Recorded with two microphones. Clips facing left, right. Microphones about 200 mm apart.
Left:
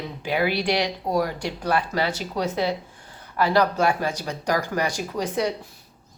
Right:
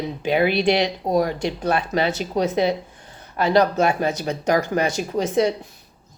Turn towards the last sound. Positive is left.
turn(degrees=-25)  # may be behind; listen again after turning